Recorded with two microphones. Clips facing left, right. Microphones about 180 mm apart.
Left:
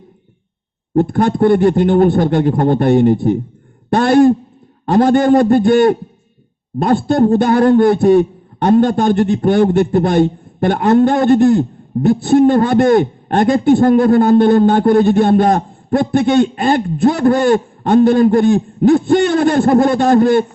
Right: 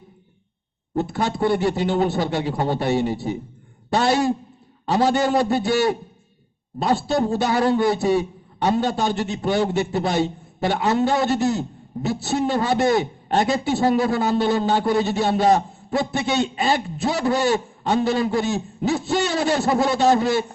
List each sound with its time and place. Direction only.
0.9 s a man's voice: 50° left (ahead or behind)